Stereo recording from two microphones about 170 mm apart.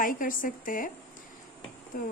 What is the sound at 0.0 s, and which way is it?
Speech, 55° left (ahead or behind).